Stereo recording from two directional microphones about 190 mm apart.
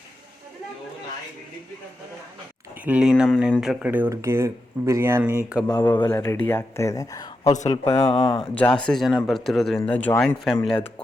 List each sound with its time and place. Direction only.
2.8 s speech: 5° right (ahead or behind)
5.7 s speech: 20° left (ahead or behind)
7.5 s speech: 40° left (ahead or behind)
7.9 s speech: 15° left (ahead or behind)
8.5 s speech: 5° left (ahead or behind)